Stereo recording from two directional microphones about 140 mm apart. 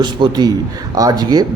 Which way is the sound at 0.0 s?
30° right (ahead or behind).